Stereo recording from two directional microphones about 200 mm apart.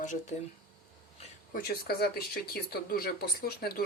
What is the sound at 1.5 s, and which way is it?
Speech, 50° left (ahead or behind).